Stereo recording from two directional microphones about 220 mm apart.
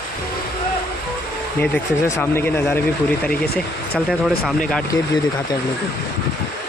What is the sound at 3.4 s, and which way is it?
Speech, 45° left (ahead or behind).